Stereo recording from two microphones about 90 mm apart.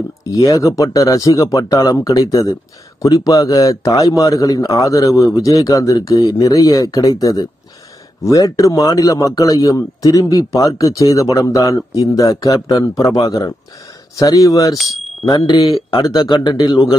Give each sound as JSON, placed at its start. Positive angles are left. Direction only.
{"t": 0.2, "sound": "a man's voice", "side_deg": 40}
{"t": 15.2, "sound": "speech", "side_deg": 50}